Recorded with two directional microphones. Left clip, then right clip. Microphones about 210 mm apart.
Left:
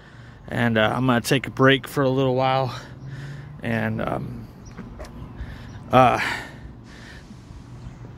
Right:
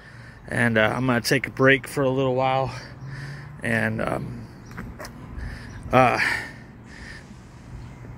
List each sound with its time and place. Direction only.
0.5 s speech: centre (ahead or behind); by 2.9 s 15° left (ahead or behind)
3.1 s a sound: 5° left (ahead or behind)
5.0 s gasp: 5° left (ahead or behind)